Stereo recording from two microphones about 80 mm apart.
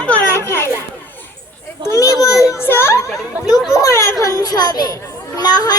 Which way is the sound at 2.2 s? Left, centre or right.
Left.